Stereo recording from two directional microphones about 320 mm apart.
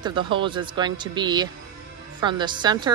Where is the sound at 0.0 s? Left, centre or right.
Centre.